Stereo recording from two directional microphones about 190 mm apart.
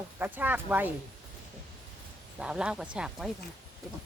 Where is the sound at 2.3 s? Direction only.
5° right (ahead or behind).